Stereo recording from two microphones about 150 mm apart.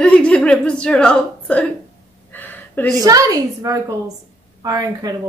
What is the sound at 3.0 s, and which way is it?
A woman's voice, 25° right (ahead or behind).